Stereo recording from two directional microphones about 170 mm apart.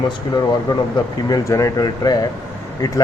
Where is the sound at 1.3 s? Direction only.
20° left (ahead or behind).